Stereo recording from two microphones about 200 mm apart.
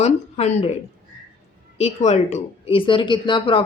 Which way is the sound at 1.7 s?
35° left (ahead or behind).